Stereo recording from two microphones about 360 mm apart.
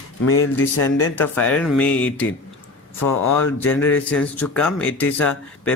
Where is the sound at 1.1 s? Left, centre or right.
Centre.